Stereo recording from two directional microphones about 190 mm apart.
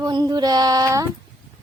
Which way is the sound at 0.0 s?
20° right (ahead or behind).